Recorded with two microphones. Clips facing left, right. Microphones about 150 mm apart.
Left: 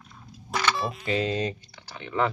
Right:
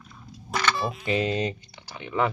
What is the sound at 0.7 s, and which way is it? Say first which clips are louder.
Speech: right 1 dB; centre (ahead or behind).